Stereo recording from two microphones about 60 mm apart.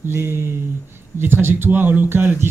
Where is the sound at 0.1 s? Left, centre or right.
Right.